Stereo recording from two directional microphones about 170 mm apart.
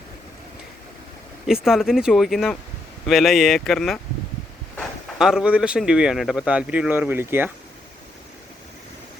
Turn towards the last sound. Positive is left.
turn(degrees=-15)  # may be behind; listen again after turning